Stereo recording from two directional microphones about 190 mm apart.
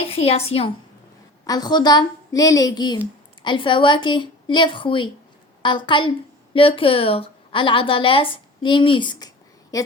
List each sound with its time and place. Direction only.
0.0 s a woman's voice: 30° left (ahead or behind)
1.5 s a woman's voice: 20° left (ahead or behind)